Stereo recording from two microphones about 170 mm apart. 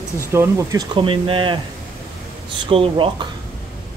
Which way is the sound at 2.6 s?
30° right (ahead or behind).